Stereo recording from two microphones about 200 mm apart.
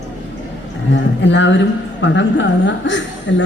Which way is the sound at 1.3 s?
65° left (ahead or behind).